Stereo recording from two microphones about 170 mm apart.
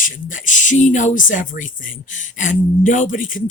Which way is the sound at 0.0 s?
50° left (ahead or behind).